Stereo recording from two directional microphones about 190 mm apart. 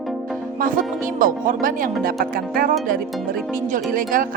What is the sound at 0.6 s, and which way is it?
Speech, 45° right (ahead or behind).